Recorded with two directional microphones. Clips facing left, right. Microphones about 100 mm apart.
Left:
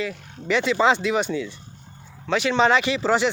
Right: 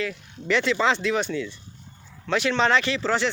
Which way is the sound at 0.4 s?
5° left (ahead or behind).